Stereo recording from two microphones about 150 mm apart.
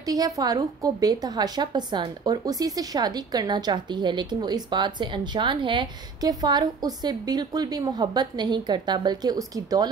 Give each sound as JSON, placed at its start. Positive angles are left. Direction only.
{"t": 0.0, "sound": "a woman's voice", "side_deg": -25}